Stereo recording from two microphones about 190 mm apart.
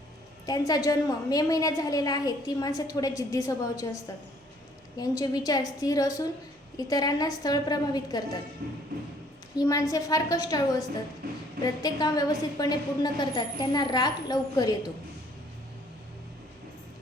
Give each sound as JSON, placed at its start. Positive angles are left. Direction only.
{"t": 0.4, "sound": "a woman's voice", "side_deg": 20}
{"t": 4.9, "sound": "a woman's voice", "side_deg": 20}
{"t": 8.6, "sound": "music", "side_deg": -55}
{"t": 9.6, "sound": "a woman's voice", "side_deg": 15}
{"t": 11.2, "sound": "a woman's voice", "side_deg": -50}
{"t": 11.6, "sound": "a woman's voice", "side_deg": 20}